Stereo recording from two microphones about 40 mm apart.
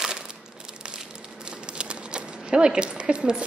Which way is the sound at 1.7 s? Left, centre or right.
Right.